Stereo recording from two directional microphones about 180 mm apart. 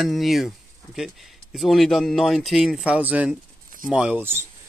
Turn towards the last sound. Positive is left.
turn(degrees=-10)  # may be behind; listen again after turning